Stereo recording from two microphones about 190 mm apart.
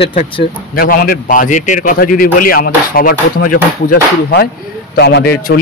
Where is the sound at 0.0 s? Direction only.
55° left (ahead or behind).